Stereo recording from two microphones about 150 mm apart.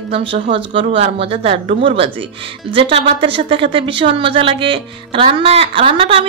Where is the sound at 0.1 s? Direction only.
40° right (ahead or behind).